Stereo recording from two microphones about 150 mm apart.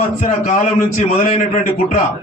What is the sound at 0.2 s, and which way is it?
A man's voice, 55° left (ahead or behind).